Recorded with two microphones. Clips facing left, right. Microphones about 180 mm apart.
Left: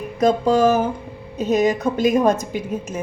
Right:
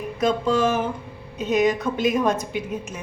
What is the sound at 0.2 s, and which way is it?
A woman's voice, 40° left (ahead or behind).